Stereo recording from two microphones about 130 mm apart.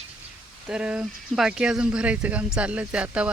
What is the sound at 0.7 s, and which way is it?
Speech, 10° right (ahead or behind).